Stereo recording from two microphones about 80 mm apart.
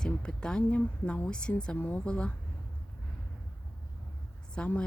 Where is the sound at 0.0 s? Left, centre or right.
Centre.